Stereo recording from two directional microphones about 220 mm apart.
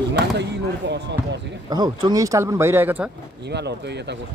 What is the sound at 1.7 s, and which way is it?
Speech, 20° right (ahead or behind).